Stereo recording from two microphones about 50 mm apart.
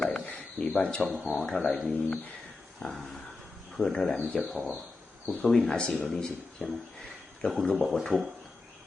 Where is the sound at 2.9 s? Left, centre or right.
Centre.